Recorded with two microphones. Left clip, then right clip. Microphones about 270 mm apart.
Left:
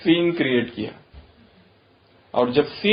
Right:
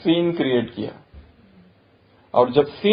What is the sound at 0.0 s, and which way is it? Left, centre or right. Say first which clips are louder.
Speech: even; right.